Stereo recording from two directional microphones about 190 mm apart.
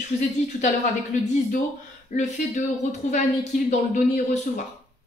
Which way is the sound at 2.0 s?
40° left (ahead or behind).